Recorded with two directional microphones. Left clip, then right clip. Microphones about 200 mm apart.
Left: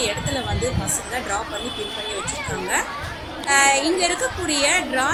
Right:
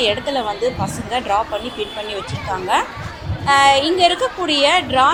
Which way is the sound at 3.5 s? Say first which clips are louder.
Right 5 dB; 5° right (ahead or behind).